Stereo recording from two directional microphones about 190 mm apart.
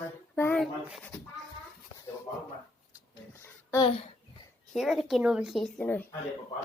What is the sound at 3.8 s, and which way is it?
Speech, 30° left (ahead or behind).